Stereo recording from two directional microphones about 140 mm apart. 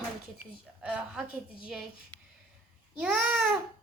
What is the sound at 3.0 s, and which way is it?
Speech, 5° right (ahead or behind).